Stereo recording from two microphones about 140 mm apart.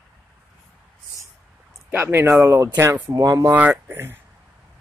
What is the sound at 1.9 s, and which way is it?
Speech, 15° right (ahead or behind).